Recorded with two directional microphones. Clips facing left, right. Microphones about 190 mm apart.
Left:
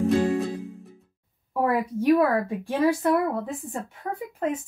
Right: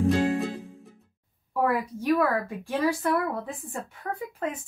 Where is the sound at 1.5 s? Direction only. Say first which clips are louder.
Left 2 dB; 20° left (ahead or behind).